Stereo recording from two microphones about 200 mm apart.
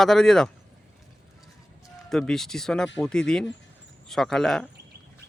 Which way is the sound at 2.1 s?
5° left (ahead or behind).